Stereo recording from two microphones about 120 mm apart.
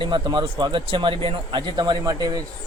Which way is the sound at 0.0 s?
40° right (ahead or behind).